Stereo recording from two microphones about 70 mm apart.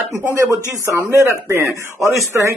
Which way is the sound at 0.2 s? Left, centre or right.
Right.